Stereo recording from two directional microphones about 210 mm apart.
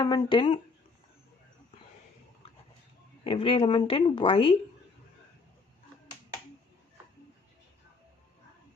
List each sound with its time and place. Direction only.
0.0 s speech: 20° left (ahead or behind)
3.2 s speech: 25° left (ahead or behind)